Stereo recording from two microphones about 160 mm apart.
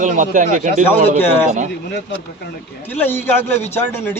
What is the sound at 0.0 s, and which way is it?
A man's voice, 50° right (ahead or behind).